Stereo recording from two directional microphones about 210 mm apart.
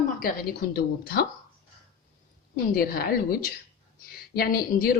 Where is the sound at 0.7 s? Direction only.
45° left (ahead or behind).